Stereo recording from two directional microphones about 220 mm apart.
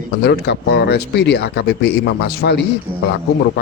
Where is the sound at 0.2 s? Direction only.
45° left (ahead or behind).